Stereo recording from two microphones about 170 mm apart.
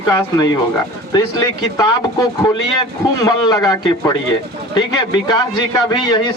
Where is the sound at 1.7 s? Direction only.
20° left (ahead or behind).